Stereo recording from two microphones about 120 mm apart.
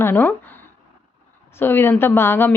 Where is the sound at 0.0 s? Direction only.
15° left (ahead or behind).